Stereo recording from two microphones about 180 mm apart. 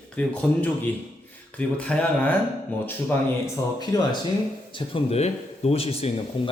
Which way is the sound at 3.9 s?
20° left (ahead or behind).